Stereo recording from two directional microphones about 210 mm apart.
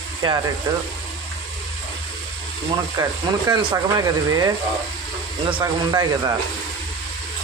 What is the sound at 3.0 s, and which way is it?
Speech, 15° right (ahead or behind).